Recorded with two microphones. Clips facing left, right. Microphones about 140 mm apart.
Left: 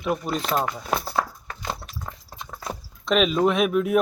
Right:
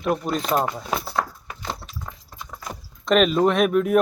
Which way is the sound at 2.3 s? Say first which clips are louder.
Left 2 dB; 25° left (ahead or behind).